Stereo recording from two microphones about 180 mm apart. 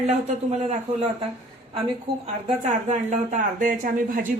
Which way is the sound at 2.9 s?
45° right (ahead or behind).